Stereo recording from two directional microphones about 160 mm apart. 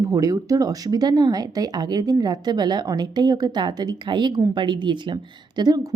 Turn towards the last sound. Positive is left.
turn(degrees=-25)  # may be behind; listen again after turning